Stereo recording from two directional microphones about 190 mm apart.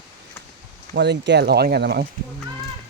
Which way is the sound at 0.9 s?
65° right (ahead or behind).